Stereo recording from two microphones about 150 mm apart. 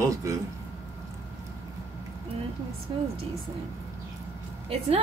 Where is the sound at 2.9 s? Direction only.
30° right (ahead or behind).